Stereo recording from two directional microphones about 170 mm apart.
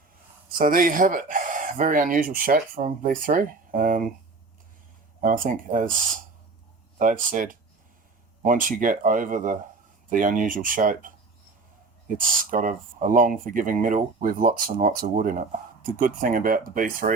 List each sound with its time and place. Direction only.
0.6 s speech: 50° right (ahead or behind)
5.2 s speech: 50° right (ahead or behind)
7.0 s speech: 55° right (ahead or behind)